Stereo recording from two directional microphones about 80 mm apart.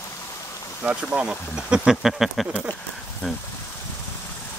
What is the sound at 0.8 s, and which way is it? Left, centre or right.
Speech, centre.